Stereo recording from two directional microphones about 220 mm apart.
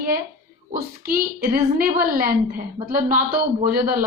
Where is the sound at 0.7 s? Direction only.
40° right (ahead or behind).